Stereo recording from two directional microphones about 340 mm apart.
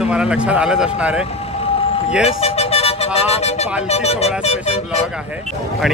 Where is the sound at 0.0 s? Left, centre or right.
Centre.